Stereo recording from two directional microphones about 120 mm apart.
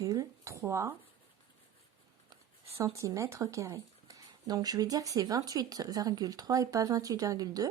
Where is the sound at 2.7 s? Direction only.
25° right (ahead or behind).